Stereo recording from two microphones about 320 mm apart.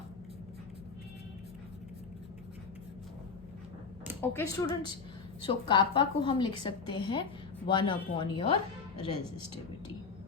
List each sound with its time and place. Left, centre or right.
4.2 s a woman's voice: centre